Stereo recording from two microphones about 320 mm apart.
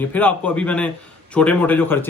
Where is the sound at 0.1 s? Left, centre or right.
Centre.